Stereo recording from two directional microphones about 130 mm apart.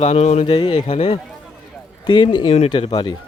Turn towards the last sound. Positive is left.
turn(degrees=35)  # may be behind; listen again after turning